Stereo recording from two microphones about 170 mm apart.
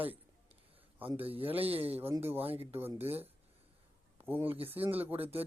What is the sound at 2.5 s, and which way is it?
Speech, 35° right (ahead or behind).